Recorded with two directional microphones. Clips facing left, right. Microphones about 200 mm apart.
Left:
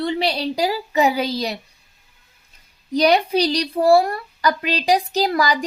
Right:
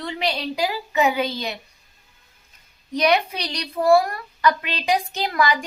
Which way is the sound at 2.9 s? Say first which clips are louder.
Left 4 dB; 35° left (ahead or behind).